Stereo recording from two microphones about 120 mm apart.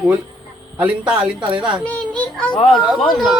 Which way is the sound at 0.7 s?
10° right (ahead or behind).